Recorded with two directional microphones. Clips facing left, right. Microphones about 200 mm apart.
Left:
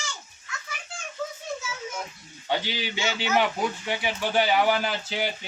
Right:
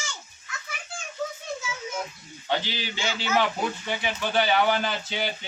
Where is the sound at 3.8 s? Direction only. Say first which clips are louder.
Left 1 dB; 10° left (ahead or behind).